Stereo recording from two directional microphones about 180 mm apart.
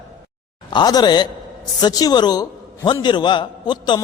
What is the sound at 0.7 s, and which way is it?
A man's voice, 25° left (ahead or behind).